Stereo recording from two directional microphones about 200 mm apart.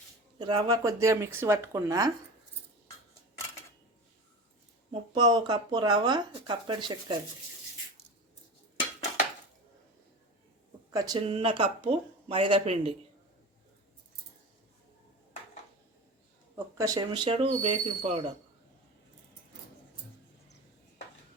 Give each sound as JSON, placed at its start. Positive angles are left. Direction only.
{"t": 0.3, "sound": "speech", "side_deg": -20}
{"t": 4.9, "sound": "speech", "side_deg": -20}
{"t": 10.9, "sound": "speech", "side_deg": -20}
{"t": 16.7, "sound": "speech", "side_deg": -15}